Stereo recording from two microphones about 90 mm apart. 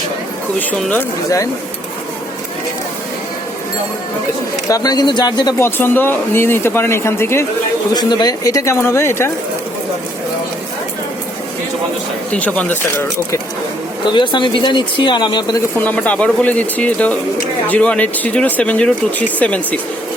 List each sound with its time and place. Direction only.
0.7 s speech: 15° left (ahead or behind)
4.7 s speech: 45° left (ahead or behind)
5.5 s speech: 25° left (ahead or behind)
7.9 s speech: 50° left (ahead or behind); by 9.3 s 30° left (ahead or behind)
12.3 s speech: 15° left (ahead or behind)
14.0 s speech: 60° left (ahead or behind)
15.8 s speech: 15° left (ahead or behind)